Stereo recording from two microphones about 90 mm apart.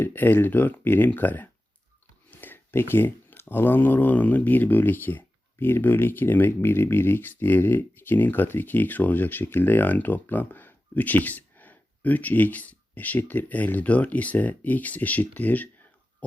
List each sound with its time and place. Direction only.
0.0 s speech: 20° left (ahead or behind)